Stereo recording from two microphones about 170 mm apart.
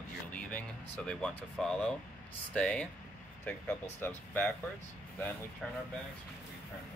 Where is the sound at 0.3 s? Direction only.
10° left (ahead or behind).